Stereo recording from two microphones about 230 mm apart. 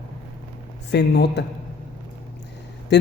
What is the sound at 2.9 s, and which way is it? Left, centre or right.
Speech, left.